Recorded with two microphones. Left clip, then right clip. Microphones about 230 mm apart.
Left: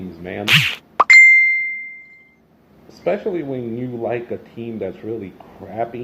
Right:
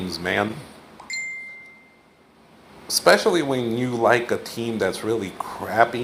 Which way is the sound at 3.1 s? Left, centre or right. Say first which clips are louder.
Right 4 dB; right.